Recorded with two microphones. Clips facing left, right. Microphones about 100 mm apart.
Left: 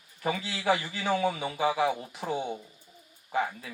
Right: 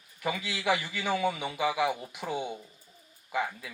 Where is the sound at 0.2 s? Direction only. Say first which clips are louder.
Left 1 dB; 35° left (ahead or behind).